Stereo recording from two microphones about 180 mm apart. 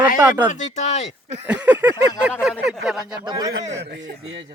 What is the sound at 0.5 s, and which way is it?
Speech, 40° left (ahead or behind).